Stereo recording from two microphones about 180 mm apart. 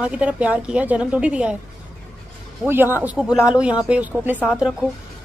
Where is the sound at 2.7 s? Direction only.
10° right (ahead or behind).